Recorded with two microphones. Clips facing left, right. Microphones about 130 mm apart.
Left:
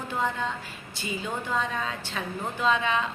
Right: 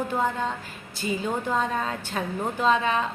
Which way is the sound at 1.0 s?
45° right (ahead or behind).